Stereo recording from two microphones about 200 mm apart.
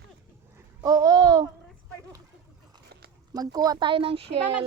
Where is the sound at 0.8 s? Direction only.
20° right (ahead or behind).